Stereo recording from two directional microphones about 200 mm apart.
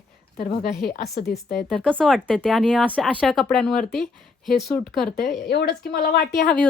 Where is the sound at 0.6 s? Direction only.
Centre (ahead or behind).